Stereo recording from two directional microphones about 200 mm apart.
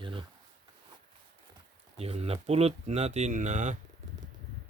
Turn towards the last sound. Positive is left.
turn(degrees=-40)  # may be behind; listen again after turning